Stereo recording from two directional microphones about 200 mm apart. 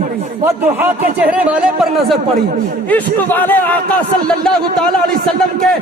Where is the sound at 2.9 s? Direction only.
10° left (ahead or behind).